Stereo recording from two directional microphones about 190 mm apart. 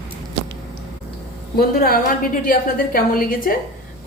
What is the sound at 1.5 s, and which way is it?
A woman's voice, 50° left (ahead or behind).